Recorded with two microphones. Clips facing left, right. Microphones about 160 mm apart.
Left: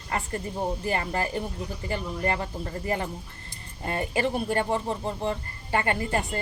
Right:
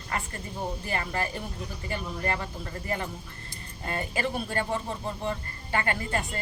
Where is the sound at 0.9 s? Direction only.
30° left (ahead or behind).